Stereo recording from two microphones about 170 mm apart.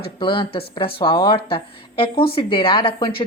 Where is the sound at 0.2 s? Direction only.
30° left (ahead or behind).